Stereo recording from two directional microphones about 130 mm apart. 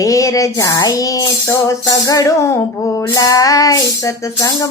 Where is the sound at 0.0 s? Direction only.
25° left (ahead or behind).